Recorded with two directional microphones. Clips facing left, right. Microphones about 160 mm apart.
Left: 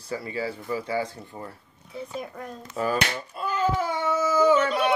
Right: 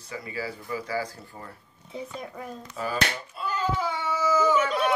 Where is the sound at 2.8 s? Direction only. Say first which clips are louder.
Left 4 dB; 50° left (ahead or behind).